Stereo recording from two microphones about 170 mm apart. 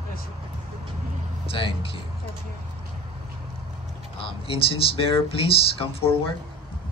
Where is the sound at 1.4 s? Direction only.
35° left (ahead or behind).